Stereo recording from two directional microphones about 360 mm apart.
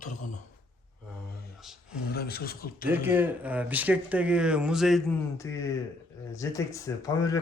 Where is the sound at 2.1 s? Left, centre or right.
Left.